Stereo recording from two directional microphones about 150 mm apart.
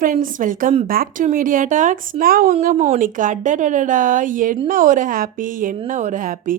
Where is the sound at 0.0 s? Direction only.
65° right (ahead or behind).